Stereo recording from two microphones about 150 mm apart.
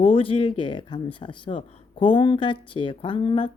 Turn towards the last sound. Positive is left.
turn(degrees=35)  # may be behind; listen again after turning